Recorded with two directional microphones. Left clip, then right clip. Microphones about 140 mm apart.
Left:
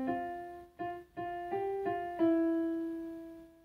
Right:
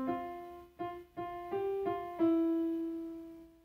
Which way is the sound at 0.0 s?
10° right (ahead or behind).